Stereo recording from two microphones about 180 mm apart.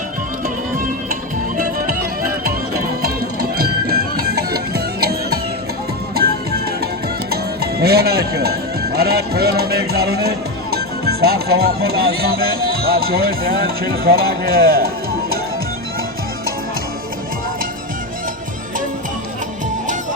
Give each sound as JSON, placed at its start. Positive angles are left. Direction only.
{"t": 1.5, "sound": "music", "side_deg": -50}
{"t": 3.6, "sound": "music", "side_deg": -60}
{"t": 7.3, "sound": "speech", "side_deg": -60}